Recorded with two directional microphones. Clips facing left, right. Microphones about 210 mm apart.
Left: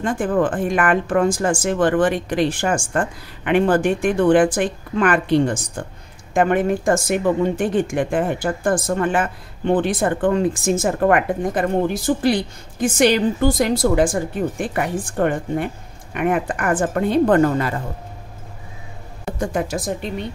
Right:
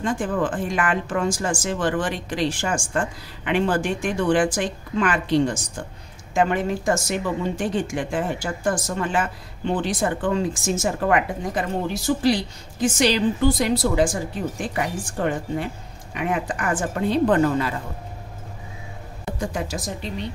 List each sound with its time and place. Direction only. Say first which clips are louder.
0.0 s a woman's voice: left 4 dB; 55° left (ahead or behind)
19.4 s speech: left 6 dB; 50° left (ahead or behind)